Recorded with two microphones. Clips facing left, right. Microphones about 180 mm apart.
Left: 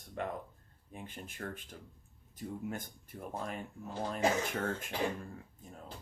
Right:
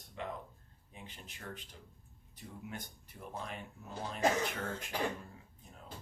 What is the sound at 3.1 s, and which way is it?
Speech, 50° left (ahead or behind).